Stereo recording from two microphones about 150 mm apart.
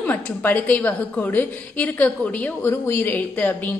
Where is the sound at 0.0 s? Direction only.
10° left (ahead or behind).